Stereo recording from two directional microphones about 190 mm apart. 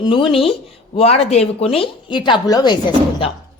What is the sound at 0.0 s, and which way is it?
A woman's voice, 25° left (ahead or behind).